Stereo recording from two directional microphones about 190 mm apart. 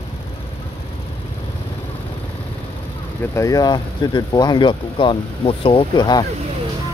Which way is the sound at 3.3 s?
20° left (ahead or behind).